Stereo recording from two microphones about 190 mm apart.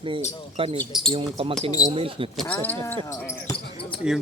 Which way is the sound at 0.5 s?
30° right (ahead or behind).